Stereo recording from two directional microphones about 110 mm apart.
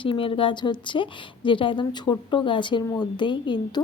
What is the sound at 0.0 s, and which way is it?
Speech, 50° left (ahead or behind).